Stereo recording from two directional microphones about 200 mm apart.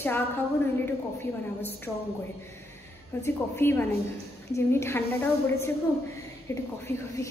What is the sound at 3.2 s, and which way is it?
A woman's voice, 10° left (ahead or behind).